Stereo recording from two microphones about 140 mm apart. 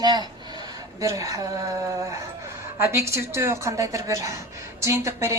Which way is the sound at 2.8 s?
20° right (ahead or behind).